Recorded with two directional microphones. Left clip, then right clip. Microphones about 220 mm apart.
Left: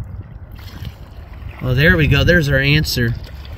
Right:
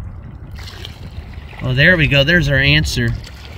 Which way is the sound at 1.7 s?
5° right (ahead or behind).